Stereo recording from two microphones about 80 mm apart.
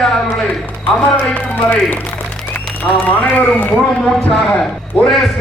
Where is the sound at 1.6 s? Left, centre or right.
Left.